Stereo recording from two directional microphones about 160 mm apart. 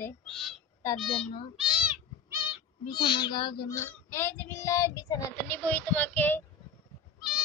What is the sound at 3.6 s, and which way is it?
Child singing, 15° left (ahead or behind).